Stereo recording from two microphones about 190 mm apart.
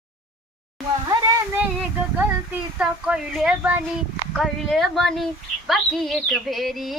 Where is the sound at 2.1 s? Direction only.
10° right (ahead or behind).